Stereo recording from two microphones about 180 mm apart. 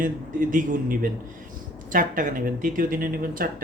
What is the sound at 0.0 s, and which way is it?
Speech, 50° right (ahead or behind).